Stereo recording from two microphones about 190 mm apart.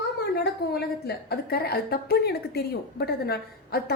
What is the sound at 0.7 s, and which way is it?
A woman's voice, 55° left (ahead or behind).